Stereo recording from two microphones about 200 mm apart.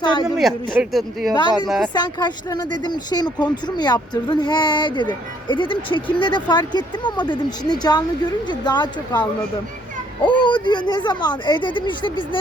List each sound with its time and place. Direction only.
0.0 s a sound: 20° left (ahead or behind)
0.3 s speech: 5° right (ahead or behind)
1.3 s speech: 20° left (ahead or behind)
1.6 s speech: centre (ahead or behind)
1.9 s speech: 20° left (ahead or behind)
10.2 s speech: 25° left (ahead or behind)